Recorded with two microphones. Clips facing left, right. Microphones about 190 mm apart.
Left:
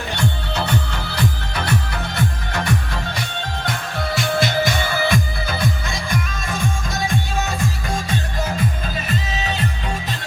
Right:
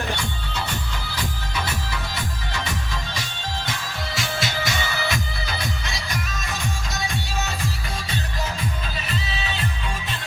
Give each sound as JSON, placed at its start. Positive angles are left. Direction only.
{"t": 0.2, "sound": "music", "side_deg": 65}
{"t": 9.0, "sound": "music", "side_deg": 45}